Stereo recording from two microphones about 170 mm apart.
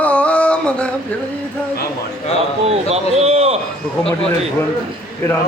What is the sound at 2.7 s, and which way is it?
Speech, 40° right (ahead or behind).